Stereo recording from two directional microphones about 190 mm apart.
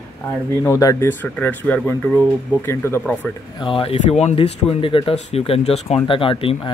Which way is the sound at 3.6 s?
25° left (ahead or behind).